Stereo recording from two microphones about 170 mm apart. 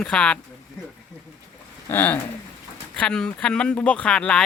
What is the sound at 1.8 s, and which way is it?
Speech, 10° left (ahead or behind).